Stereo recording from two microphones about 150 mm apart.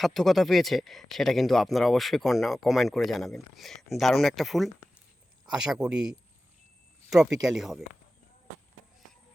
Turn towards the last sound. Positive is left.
turn(degrees=0)  # may be behind; listen again after turning